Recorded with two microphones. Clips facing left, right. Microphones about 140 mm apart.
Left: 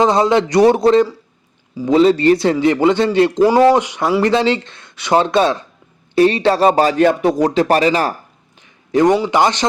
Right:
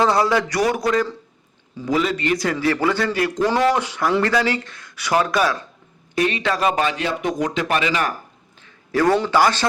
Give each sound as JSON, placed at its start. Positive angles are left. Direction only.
{"t": 0.0, "sound": "a man's voice", "side_deg": 20}
{"t": 3.8, "sound": "a man's voice", "side_deg": 20}
{"t": 7.2, "sound": "speech", "side_deg": 35}
{"t": 8.6, "sound": "a sound", "side_deg": 20}
{"t": 9.3, "sound": "a man's voice", "side_deg": 20}